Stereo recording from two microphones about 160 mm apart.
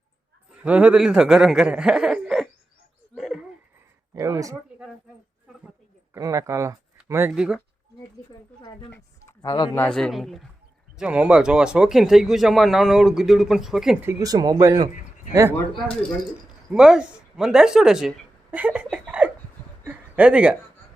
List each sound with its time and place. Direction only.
0.6 s speech: 10° right (ahead or behind)
3.2 s a sound: centre (ahead or behind)
4.1 s speech: 20° right (ahead or behind)
6.1 s speech: 20° right (ahead or behind)
9.4 s speech: 25° left (ahead or behind)
9.7 s speech: 5° left (ahead or behind)
14.0 s speech: 20° right (ahead or behind)
16.7 s speech: 5° right (ahead or behind)
18.5 s laughter: 10° right (ahead or behind)
19.8 s a sound: 10° right (ahead or behind)